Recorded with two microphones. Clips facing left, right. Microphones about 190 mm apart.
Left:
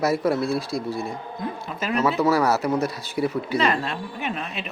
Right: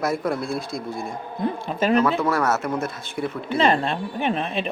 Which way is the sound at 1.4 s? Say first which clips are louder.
Right 8 dB; 30° right (ahead or behind).